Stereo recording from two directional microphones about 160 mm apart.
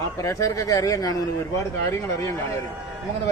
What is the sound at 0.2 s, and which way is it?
A man's voice, 20° left (ahead or behind).